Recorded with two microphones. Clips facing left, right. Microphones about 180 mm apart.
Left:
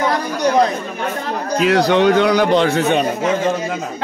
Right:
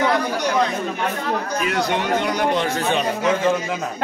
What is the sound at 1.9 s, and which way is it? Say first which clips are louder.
Speech: left 8 dB; 80° left.